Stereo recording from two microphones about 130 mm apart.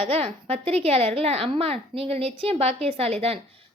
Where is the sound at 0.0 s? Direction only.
50° right (ahead or behind).